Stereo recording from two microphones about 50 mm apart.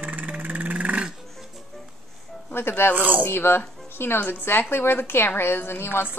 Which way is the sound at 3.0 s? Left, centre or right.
Right.